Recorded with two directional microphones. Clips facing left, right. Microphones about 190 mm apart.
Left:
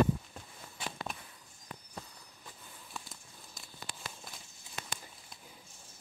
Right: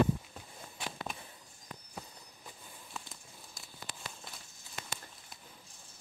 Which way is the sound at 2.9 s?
Centre (ahead or behind).